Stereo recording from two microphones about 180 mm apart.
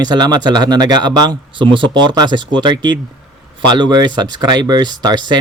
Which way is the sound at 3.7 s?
25° right (ahead or behind).